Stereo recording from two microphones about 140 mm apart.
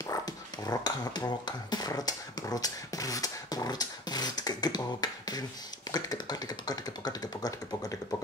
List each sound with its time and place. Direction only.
0.0 s speech: 25° left (ahead or behind)